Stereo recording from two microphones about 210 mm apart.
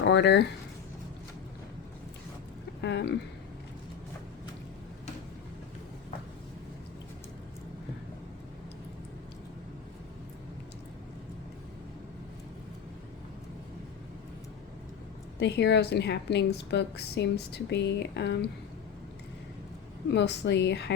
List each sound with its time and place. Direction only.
0.0 s speech: 55° left (ahead or behind)
2.8 s a woman's voice: 55° left (ahead or behind)
15.4 s a woman's voice: 55° left (ahead or behind)
20.1 s a woman's voice: 55° left (ahead or behind)